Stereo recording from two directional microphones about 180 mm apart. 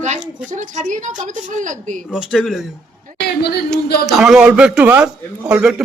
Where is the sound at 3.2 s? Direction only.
65° left (ahead or behind).